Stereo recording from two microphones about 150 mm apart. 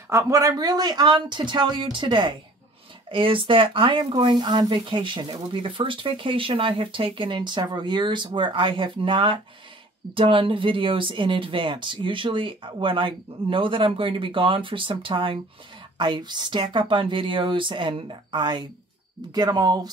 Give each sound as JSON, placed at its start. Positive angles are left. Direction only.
{"t": 0.1, "sound": "speech", "side_deg": -20}